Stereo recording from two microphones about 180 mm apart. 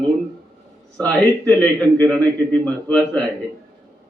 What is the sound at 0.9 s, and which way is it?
A man's voice, 5° left (ahead or behind).